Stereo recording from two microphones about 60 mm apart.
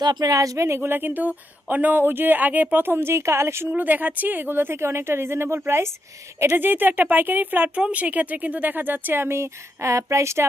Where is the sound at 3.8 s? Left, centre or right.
Right.